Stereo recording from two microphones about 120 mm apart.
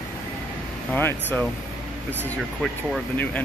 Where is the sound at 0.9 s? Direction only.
15° left (ahead or behind).